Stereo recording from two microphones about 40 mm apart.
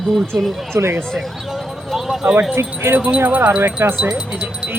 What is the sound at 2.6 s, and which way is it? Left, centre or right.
Speech, right.